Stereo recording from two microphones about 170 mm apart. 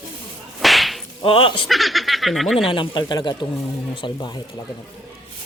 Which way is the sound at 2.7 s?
30° left (ahead or behind).